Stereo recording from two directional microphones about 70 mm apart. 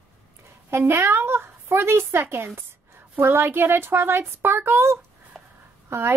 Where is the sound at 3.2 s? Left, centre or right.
Right.